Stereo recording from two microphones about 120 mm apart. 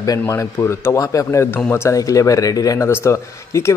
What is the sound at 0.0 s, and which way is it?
Speech, 30° left (ahead or behind).